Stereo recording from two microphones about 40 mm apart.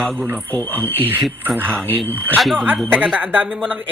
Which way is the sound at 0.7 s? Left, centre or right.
Right.